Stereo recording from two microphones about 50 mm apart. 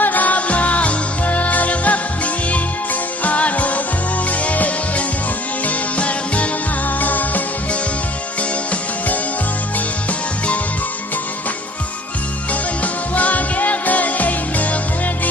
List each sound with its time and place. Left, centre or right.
0.0 s music: left
12.8 s music: left